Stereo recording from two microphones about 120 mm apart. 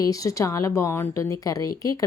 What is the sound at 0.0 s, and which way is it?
A woman's voice, 30° left (ahead or behind).